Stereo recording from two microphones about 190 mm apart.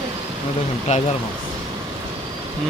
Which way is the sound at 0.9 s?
35° left (ahead or behind).